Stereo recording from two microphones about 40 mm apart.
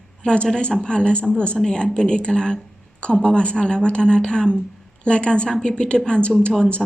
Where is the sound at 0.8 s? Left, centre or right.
Left.